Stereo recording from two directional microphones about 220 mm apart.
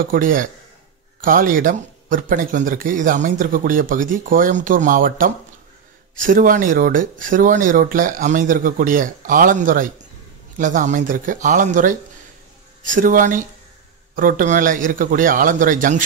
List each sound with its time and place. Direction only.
0.1 s speech: 40° right (ahead or behind)